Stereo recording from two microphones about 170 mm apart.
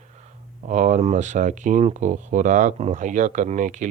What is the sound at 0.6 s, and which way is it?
Speech, 45° right (ahead or behind).